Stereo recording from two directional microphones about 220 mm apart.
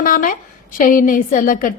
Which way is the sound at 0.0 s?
40° left (ahead or behind).